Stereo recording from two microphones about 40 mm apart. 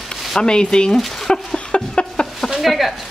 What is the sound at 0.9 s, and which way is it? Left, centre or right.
Chicken, centre.